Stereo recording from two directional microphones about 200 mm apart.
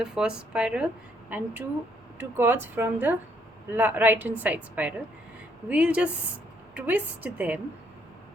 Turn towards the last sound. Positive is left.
turn(degrees=-10)  # may be behind; listen again after turning